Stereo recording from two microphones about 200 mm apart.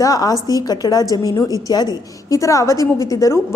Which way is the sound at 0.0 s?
20° left (ahead or behind).